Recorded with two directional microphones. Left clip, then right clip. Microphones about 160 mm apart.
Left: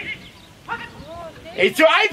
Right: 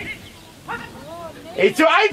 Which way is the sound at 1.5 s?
35° left (ahead or behind).